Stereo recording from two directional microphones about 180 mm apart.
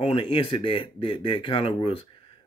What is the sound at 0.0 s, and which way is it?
Speech, 30° left (ahead or behind).